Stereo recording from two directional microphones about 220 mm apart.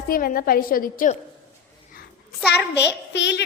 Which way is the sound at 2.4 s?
45° left (ahead or behind).